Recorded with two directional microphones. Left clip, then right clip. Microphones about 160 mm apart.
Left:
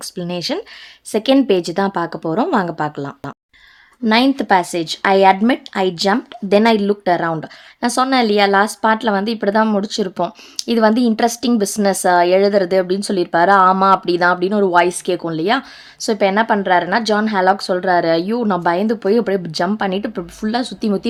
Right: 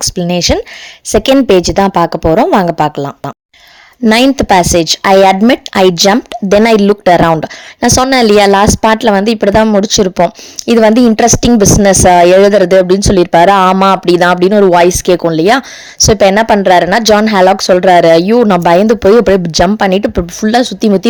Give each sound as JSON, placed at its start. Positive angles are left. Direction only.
{"t": 0.0, "sound": "a woman's voice", "side_deg": -45}